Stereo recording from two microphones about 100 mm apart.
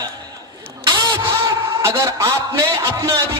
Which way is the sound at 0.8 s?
40° right (ahead or behind).